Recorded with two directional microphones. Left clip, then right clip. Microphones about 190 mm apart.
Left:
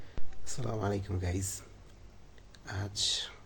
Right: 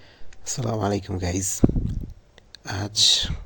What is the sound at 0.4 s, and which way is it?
Speech, 45° right (ahead or behind).